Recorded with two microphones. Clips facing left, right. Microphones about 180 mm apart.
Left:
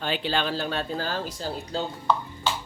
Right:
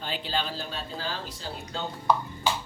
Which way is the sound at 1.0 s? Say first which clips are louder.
Left 5 dB; 45° left (ahead or behind).